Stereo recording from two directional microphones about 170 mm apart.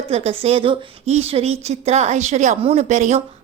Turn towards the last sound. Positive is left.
turn(degrees=-45)  # may be behind; listen again after turning